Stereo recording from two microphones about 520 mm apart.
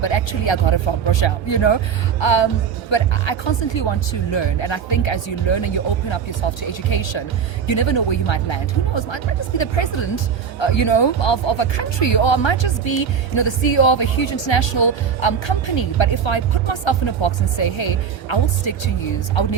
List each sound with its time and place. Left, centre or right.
0.0 s speech: left